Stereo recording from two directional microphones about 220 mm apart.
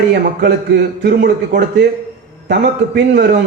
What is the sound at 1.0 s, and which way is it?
Speech, 45° right (ahead or behind).